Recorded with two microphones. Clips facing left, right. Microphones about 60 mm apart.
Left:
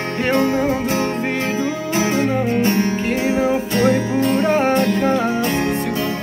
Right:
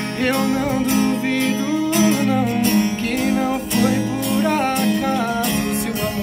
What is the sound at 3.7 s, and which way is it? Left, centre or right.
Music, left.